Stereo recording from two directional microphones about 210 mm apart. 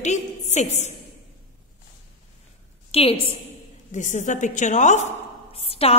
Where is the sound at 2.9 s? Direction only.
25° left (ahead or behind).